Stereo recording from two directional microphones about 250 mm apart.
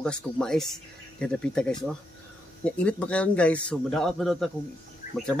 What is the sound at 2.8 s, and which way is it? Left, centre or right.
Speech, centre.